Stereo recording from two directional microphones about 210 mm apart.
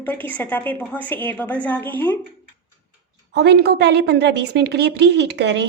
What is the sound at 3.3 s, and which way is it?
A woman's voice, 55° right (ahead or behind).